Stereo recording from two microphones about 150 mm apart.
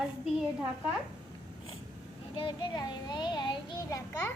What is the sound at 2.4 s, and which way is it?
A child's voice, 30° left (ahead or behind).